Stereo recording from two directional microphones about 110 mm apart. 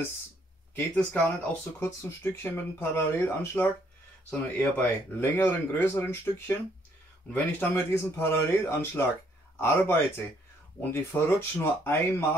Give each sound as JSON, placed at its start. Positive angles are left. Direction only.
{"t": 0.7, "sound": "speech", "side_deg": 10}
{"t": 1.8, "sound": "speech", "side_deg": 25}